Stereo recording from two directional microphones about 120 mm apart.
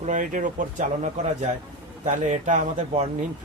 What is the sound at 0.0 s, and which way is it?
Speech, 90° right.